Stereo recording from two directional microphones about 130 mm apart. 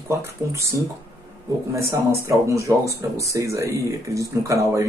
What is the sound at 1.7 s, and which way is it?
Speech, 20° right (ahead or behind).